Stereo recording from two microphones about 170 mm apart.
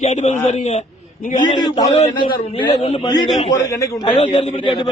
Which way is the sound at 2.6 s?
40° left (ahead or behind).